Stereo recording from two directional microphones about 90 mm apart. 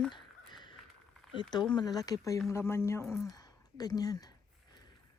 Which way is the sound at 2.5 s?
30° left (ahead or behind).